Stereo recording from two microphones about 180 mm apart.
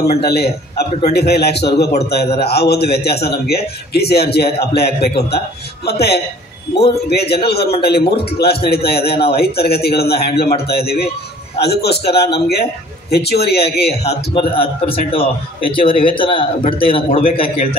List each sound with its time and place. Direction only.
0.2 s a man's voice: 65° left (ahead or behind)
14.0 s speech: 30° left (ahead or behind)